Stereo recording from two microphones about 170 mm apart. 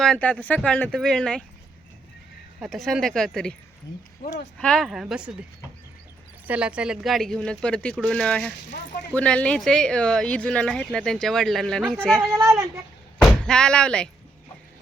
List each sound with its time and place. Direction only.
0.0 s speech: 5° left (ahead or behind)
2.6 s speech: centre (ahead or behind)
4.5 s speech: 5° left (ahead or behind)
6.5 s speech: 5° right (ahead or behind)
12.2 s speech: 15° right (ahead or behind)
13.2 s speech: 5° left (ahead or behind)